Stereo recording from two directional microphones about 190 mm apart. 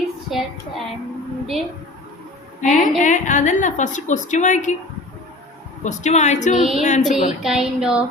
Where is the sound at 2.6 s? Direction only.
40° left (ahead or behind).